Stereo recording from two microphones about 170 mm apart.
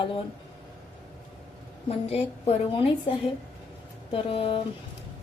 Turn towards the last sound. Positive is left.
turn(degrees=30)  # may be behind; listen again after turning